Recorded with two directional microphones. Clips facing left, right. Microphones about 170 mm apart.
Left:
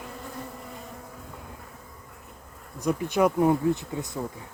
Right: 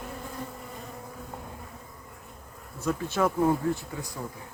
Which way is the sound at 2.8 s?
15° left (ahead or behind).